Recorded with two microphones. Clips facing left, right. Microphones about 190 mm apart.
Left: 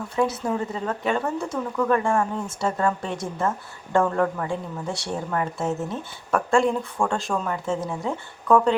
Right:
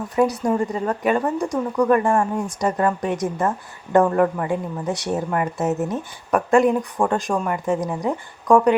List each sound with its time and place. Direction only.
0.2 s a woman's voice: 10° right (ahead or behind)